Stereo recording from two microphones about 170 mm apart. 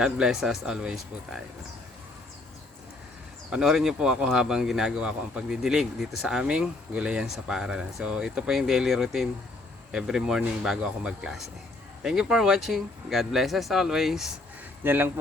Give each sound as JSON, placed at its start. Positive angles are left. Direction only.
{"t": 0.0, "sound": "speech", "side_deg": -5}
{"t": 3.5, "sound": "speech", "side_deg": -5}